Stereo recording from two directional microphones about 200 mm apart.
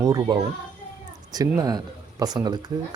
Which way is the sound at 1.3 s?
20° right (ahead or behind).